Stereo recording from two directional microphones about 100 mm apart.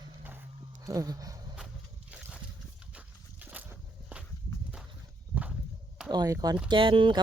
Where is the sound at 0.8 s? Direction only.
35° right (ahead or behind).